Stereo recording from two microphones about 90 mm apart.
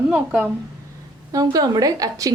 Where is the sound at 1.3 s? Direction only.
45° right (ahead or behind).